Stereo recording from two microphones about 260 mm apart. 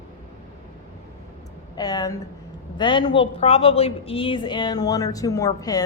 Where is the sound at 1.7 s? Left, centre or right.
Centre.